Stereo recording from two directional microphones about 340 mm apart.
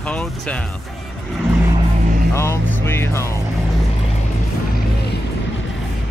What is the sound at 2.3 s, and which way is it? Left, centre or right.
Speech, centre.